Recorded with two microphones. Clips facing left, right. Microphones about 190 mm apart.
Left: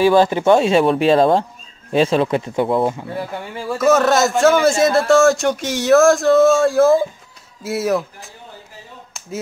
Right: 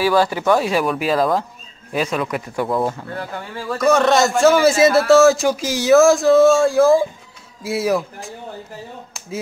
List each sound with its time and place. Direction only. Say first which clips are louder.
0.0 s speech: left 4 dB; 20° left (ahead or behind); by 8.3 s centre (ahead or behind)